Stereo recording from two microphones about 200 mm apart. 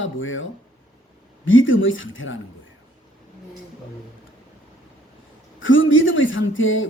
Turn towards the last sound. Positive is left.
turn(degrees=75)  # may be behind; listen again after turning